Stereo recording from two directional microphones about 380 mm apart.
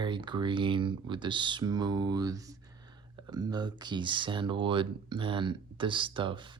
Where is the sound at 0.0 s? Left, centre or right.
Centre.